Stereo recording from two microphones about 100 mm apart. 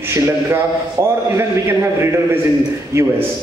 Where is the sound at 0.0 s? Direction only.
25° right (ahead or behind).